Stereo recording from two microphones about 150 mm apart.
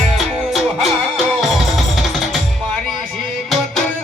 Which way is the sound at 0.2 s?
Centre (ahead or behind).